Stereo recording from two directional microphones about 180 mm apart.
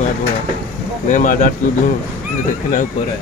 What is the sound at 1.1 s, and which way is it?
Speech, 45° left (ahead or behind).